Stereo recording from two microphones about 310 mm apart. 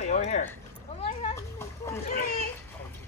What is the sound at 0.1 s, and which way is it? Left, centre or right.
Speech, left.